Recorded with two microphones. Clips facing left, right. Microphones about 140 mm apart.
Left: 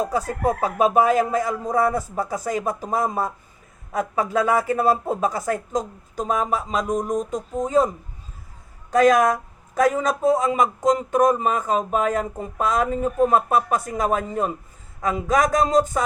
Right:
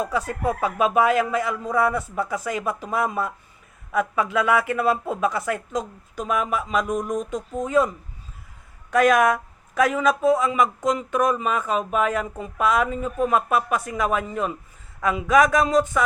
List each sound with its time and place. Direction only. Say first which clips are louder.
0.0 s speech: left 2 dB; 40° left (ahead or behind)